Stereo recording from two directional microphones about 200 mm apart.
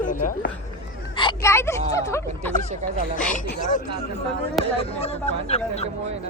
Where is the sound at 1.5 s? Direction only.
15° left (ahead or behind).